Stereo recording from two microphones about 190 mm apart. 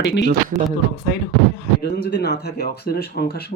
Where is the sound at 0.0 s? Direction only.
65° left (ahead or behind).